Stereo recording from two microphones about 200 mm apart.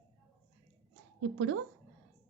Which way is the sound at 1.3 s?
90° right.